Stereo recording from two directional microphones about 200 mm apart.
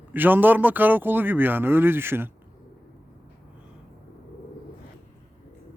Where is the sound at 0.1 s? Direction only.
10° right (ahead or behind).